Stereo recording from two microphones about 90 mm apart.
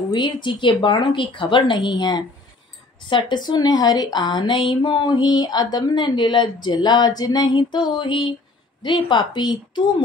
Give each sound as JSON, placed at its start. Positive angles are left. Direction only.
{"t": 0.1, "sound": "speech", "side_deg": 60}